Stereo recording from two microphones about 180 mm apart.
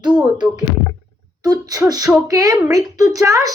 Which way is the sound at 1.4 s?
20° right (ahead or behind).